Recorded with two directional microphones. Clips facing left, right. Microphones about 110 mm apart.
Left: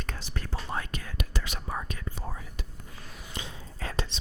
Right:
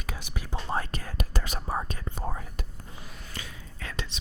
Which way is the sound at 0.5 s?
35° right (ahead or behind).